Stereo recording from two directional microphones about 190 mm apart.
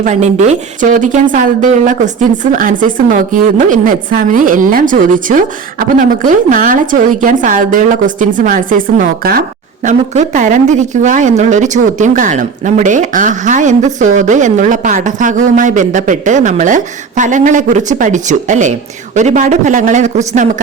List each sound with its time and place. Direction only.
0.0 s a woman's voice: 40° right (ahead or behind)